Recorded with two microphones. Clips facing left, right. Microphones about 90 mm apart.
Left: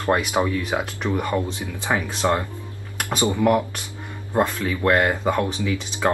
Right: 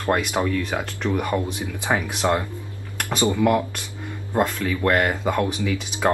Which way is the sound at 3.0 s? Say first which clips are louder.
Even; 15° left (ahead or behind).